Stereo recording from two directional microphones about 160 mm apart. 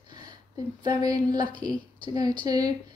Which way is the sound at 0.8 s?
25° right (ahead or behind).